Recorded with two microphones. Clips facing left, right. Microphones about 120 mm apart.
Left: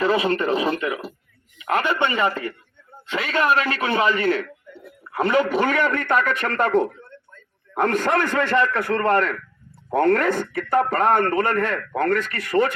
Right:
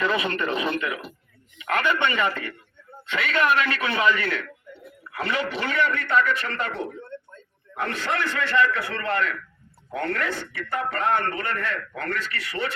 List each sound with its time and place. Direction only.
0.0 s speech: 35° left (ahead or behind)